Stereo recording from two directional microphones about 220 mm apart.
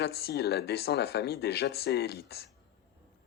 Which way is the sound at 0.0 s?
45° left (ahead or behind).